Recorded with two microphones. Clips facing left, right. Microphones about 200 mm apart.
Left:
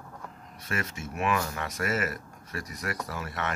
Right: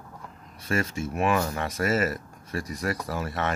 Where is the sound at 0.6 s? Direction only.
30° right (ahead or behind).